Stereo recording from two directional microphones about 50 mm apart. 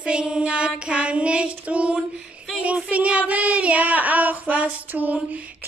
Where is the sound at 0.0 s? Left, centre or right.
Centre.